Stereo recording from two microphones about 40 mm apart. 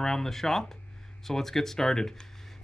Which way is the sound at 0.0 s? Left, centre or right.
Centre.